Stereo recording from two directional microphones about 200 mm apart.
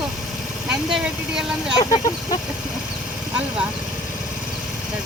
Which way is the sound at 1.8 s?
20° left (ahead or behind).